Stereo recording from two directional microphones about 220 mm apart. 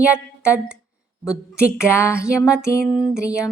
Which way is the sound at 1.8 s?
10° left (ahead or behind).